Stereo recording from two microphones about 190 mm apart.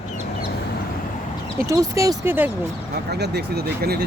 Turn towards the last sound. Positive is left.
turn(degrees=-55)  # may be behind; listen again after turning